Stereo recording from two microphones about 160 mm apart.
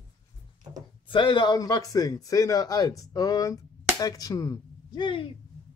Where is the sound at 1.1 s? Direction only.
30° left (ahead or behind).